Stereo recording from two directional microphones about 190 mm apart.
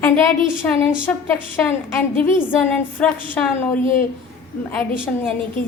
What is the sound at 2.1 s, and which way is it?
A woman's voice, 10° left (ahead or behind).